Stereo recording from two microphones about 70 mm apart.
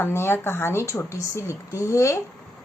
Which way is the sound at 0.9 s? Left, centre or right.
Left.